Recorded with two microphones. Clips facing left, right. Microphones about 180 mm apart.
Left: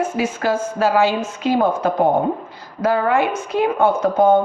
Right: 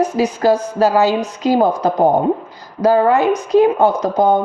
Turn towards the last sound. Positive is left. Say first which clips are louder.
# right 1 dB
turn(degrees=-40)  # may be behind; listen again after turning